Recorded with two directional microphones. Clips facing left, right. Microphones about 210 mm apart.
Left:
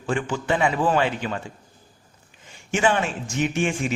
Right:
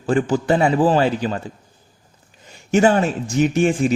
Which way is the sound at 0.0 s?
40° right (ahead or behind).